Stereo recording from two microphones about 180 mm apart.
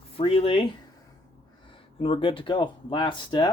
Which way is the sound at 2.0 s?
30° left (ahead or behind).